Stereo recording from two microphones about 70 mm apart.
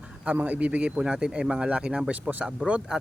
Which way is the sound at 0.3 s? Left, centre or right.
Right.